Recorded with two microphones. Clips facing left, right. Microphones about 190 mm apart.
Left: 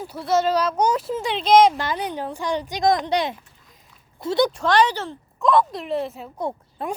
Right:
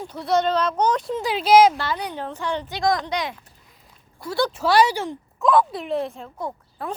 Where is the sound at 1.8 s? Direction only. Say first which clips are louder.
Left 1 dB; 20° left (ahead or behind).